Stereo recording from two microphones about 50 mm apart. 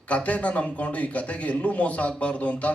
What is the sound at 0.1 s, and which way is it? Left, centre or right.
A man's voice, left.